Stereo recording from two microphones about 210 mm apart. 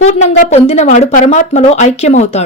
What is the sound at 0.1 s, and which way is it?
Speech, 30° left (ahead or behind).